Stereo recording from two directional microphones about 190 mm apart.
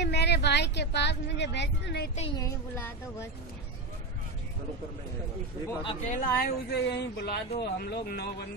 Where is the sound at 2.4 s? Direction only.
15° left (ahead or behind).